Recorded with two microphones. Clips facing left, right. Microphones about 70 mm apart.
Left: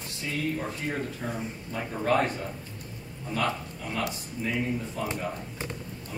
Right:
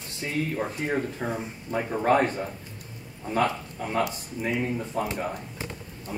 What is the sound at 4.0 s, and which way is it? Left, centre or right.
Speech, right.